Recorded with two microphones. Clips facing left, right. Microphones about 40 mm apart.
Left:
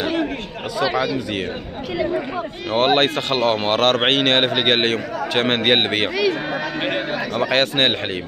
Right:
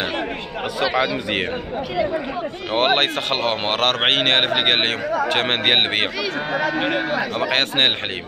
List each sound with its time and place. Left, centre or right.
2.7 s a man's voice: centre
6.8 s a man's voice: centre
7.3 s a man's voice: right